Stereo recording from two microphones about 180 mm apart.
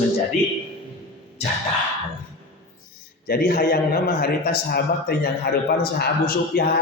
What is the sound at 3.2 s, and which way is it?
A man's voice, 55° left (ahead or behind).